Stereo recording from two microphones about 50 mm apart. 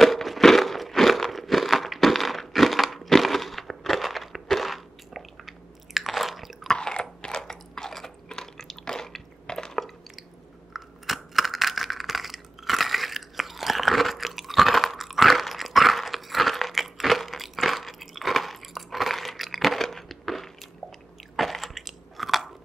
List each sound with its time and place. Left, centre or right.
0.0 s a sound: centre
6.7 s chewing: centre
10.7 s coin: centre
21.4 s crunch: centre